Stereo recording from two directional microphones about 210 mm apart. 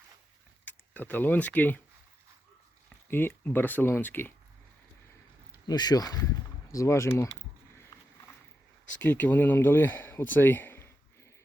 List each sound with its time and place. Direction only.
0.6 s speech: 10° left (ahead or behind)
3.1 s speech: 10° left (ahead or behind)
5.5 s speech: 20° left (ahead or behind)
8.9 s speech: 5° left (ahead or behind)